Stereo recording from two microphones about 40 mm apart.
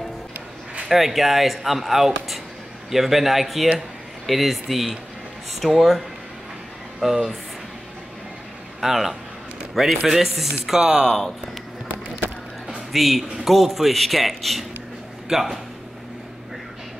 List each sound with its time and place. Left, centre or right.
0.8 s a man's voice: centre
8.8 s a man's voice: centre
11.1 s a man's voice: centre
12.9 s a man's voice: centre